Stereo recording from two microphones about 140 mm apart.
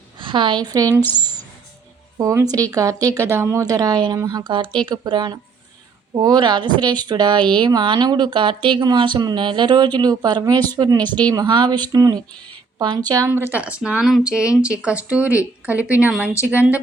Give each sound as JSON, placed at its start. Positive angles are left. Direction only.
{"t": 0.2, "sound": "a woman's voice", "side_deg": -35}
{"t": 2.1, "sound": "a woman's voice", "side_deg": -25}